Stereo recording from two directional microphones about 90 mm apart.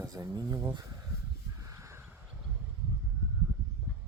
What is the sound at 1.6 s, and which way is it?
Caw, 35° right (ahead or behind).